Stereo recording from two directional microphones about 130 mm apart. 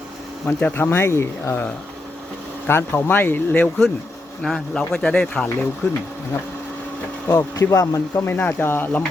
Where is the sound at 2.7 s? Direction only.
15° left (ahead or behind).